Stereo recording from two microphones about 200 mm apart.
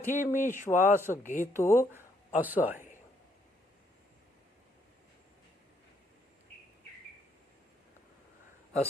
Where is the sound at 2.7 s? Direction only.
40° left (ahead or behind).